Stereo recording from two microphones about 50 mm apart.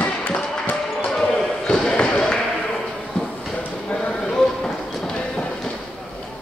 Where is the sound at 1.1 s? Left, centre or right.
Centre.